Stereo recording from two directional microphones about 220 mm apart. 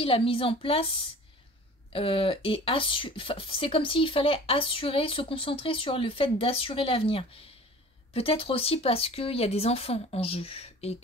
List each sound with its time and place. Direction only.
0.0 s speech: 25° left (ahead or behind)